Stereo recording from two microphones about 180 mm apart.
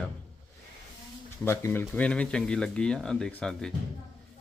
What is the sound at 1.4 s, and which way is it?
Speech, 15° left (ahead or behind).